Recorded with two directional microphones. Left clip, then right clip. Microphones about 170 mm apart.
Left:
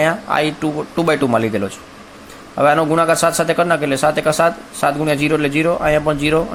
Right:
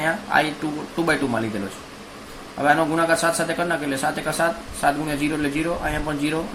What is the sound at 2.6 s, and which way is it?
Speech, 60° left (ahead or behind).